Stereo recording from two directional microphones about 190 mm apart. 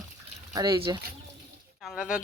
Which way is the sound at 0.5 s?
20° right (ahead or behind).